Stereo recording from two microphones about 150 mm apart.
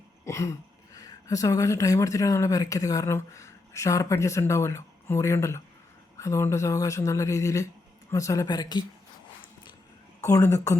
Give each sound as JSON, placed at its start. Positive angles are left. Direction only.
{"t": 0.3, "sound": "speech", "side_deg": 20}
{"t": 10.2, "sound": "speech", "side_deg": 20}